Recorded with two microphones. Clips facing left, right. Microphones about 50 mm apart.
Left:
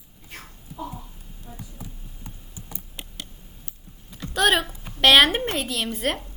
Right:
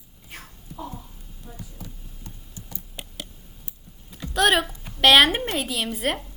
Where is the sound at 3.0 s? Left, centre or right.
Centre.